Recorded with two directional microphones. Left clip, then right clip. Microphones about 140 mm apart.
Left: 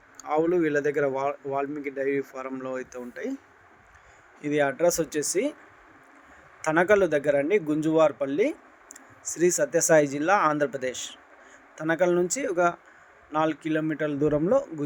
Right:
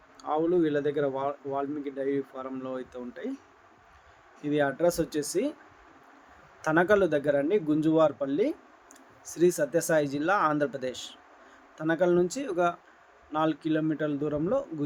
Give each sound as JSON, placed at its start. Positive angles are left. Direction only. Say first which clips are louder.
{"t": 0.3, "sound": "a man's voice", "louder": "left 2 dB", "side_deg": 40}
{"t": 4.4, "sound": "speech", "louder": "left 3 dB", "side_deg": 25}
{"t": 6.6, "sound": "a man's voice", "louder": "left 2 dB", "side_deg": 25}